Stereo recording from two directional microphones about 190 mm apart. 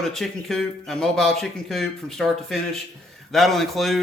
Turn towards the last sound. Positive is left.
turn(degrees=0)  # may be behind; listen again after turning